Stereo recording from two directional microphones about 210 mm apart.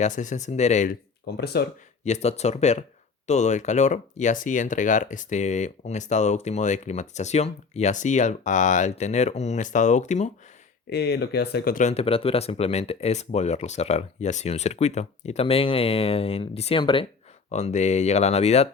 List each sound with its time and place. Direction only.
0.0 s speech: 35° left (ahead or behind)
1.3 s speech: 50° left (ahead or behind)
2.0 s speech: 30° left (ahead or behind)
10.8 s speech: 50° left (ahead or behind); by 18.7 s 30° left (ahead or behind)